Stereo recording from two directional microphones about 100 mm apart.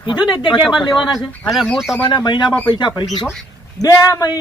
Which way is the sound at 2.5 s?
15° left (ahead or behind).